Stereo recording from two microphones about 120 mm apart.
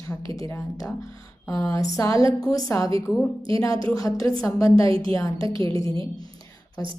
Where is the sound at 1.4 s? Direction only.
30° left (ahead or behind).